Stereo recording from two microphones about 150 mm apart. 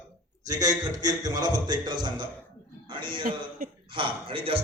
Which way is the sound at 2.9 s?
35° right (ahead or behind).